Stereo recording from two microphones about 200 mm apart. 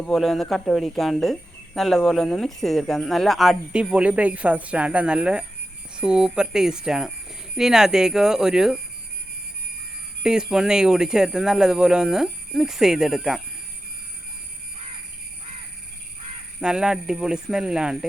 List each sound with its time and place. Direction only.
0.0 s speech: centre (ahead or behind)
10.2 s speech: 5° right (ahead or behind)
16.6 s speech: 5° right (ahead or behind)